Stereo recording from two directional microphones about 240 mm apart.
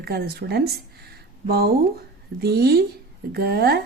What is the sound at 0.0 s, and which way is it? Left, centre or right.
A woman's voice, right.